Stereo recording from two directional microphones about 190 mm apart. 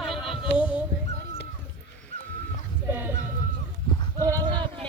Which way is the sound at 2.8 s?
10° right (ahead or behind).